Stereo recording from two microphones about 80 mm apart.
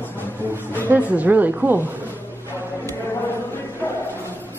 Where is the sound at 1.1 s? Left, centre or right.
Right.